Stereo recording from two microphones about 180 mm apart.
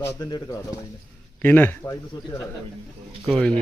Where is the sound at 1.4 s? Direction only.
10° left (ahead or behind).